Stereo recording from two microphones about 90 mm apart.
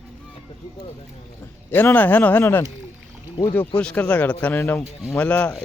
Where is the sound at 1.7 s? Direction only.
20° left (ahead or behind).